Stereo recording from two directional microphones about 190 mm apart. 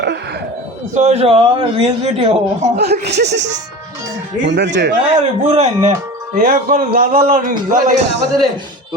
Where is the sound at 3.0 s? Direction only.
60° right (ahead or behind).